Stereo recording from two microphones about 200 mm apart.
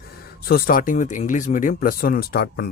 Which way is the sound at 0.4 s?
45° left (ahead or behind).